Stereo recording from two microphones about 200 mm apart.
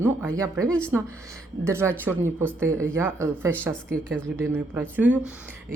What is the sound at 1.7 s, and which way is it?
Speech, 15° right (ahead or behind).